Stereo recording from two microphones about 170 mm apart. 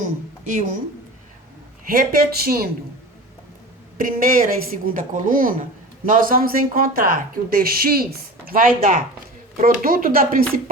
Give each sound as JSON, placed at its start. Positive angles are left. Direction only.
{"t": 0.0, "sound": "speech", "side_deg": -50}
{"t": 1.9, "sound": "speech", "side_deg": -55}
{"t": 3.9, "sound": "speech", "side_deg": -55}